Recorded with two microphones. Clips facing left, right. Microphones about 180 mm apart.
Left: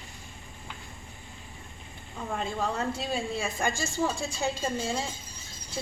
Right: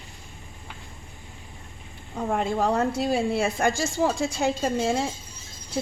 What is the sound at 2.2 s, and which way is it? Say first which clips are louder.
A woman's voice: right 7 dB; 60° right (ahead or behind).